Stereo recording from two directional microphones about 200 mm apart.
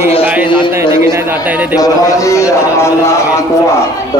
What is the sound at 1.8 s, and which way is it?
Speech, 15° left (ahead or behind).